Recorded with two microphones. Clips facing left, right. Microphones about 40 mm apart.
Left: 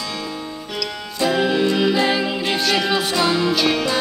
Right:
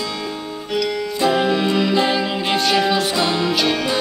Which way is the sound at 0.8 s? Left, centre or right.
Right.